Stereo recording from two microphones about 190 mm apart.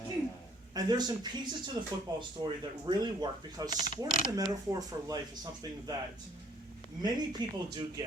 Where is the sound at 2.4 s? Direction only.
30° right (ahead or behind).